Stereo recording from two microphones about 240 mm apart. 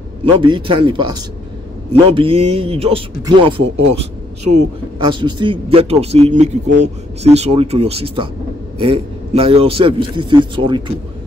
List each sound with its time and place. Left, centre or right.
0.2 s speech: right